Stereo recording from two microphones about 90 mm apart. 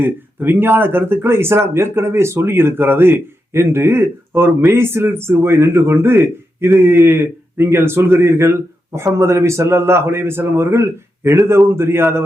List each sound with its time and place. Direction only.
0.0 s speech: 20° right (ahead or behind)